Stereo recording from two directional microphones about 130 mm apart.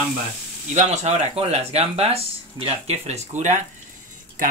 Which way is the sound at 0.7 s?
60° right (ahead or behind).